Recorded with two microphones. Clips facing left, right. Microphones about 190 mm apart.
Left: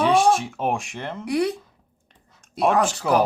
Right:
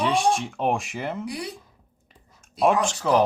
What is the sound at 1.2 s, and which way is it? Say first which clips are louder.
Speech: left 10 dB; 65° left (ahead or behind).